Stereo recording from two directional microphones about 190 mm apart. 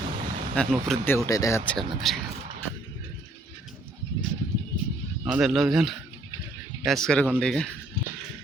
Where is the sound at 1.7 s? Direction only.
Centre (ahead or behind).